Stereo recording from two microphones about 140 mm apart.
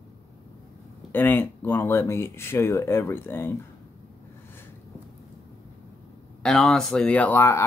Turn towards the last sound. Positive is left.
turn(degrees=20)  # may be behind; listen again after turning